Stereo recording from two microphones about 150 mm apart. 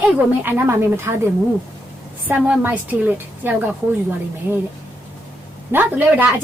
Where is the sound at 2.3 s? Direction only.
10° right (ahead or behind).